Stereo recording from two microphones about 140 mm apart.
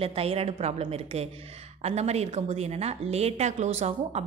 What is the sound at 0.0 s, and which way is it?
A woman's voice, 45° right (ahead or behind).